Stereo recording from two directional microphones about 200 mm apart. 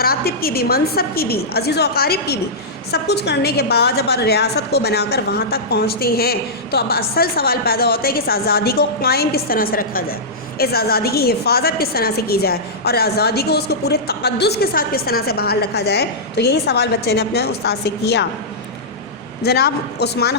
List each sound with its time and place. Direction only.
0.0 s a woman's voice: 50° left (ahead or behind)
19.5 s speech: 55° left (ahead or behind)